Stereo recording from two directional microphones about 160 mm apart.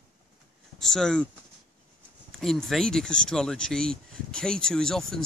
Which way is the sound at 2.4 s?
Centre (ahead or behind).